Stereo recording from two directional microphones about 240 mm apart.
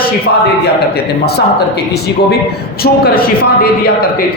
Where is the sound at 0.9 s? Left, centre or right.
Left.